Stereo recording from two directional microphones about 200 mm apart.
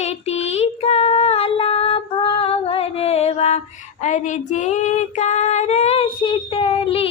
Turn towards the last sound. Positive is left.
turn(degrees=30)  # may be behind; listen again after turning